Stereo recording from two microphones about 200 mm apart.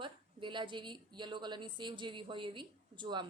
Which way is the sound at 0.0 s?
25° right (ahead or behind).